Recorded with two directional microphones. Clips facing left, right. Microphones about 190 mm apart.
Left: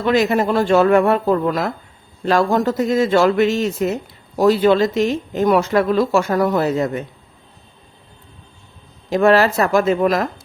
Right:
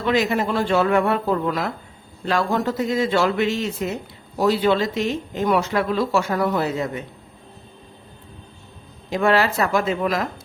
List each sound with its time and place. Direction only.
0.0 s speech: 45° left (ahead or behind)
2.2 s speech: 45° left (ahead or behind)
9.0 s speech: 40° left (ahead or behind)